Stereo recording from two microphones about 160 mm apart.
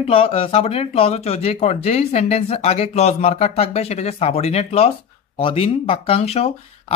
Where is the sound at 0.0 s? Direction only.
35° left (ahead or behind).